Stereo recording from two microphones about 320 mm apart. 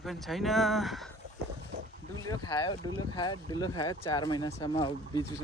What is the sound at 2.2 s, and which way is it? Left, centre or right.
Speech, centre.